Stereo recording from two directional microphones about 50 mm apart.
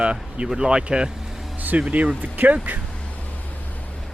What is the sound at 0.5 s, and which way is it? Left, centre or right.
Speech, right.